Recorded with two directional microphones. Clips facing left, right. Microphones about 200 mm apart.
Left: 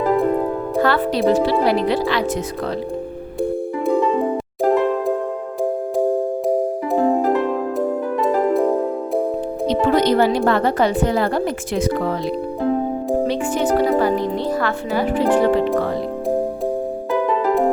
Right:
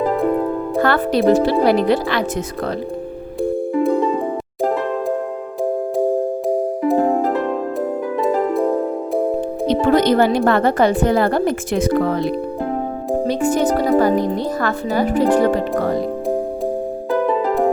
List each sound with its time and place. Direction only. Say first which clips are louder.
0.8 s music: right 1 dB; 50° right (ahead or behind)
1.3 s speech: right 3 dB; 50° right (ahead or behind)
9.6 s speech: right 2 dB; 50° right (ahead or behind)
13.2 s music: right 3 dB; 40° right (ahead or behind)
14.0 s speech: right 2 dB; 45° right (ahead or behind)